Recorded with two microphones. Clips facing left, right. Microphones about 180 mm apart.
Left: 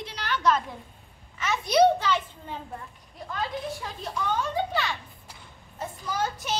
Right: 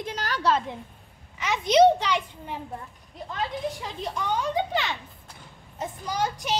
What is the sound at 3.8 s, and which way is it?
A child's voice, 15° right (ahead or behind).